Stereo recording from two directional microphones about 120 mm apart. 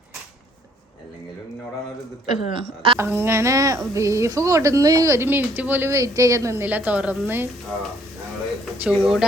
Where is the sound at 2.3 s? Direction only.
45° right (ahead or behind).